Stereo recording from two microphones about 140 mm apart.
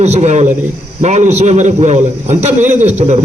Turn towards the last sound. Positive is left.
turn(degrees=-55)  # may be behind; listen again after turning